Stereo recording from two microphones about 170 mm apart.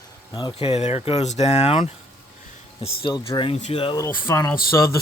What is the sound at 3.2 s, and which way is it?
Speech, 30° left (ahead or behind).